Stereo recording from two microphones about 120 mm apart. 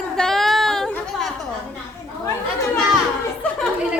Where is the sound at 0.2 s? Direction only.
5° left (ahead or behind).